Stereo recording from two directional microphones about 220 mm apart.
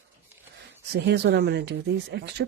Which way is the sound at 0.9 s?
50° right (ahead or behind).